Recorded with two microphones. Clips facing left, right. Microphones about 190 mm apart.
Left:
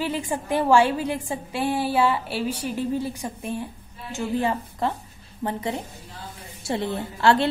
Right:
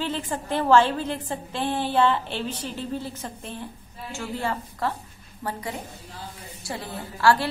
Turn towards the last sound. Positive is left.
turn(degrees=25)  # may be behind; listen again after turning